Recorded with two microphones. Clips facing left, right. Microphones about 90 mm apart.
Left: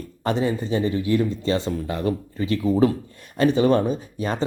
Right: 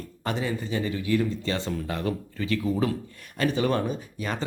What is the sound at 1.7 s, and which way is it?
Speech, 10° left (ahead or behind).